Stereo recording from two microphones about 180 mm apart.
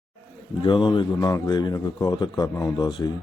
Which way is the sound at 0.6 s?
25° left (ahead or behind).